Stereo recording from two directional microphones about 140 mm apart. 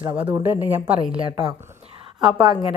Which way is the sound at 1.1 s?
40° right (ahead or behind).